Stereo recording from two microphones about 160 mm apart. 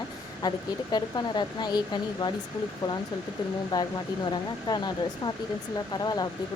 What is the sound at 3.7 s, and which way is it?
Speech, 25° left (ahead or behind).